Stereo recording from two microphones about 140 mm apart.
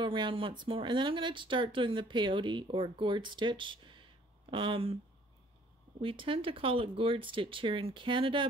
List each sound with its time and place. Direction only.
0.0 s speech: 35° right (ahead or behind)
5.9 s speech: 40° right (ahead or behind)